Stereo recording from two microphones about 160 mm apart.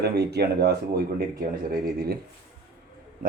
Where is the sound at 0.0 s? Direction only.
90° right; by 2.1 s 65° right (ahead or behind).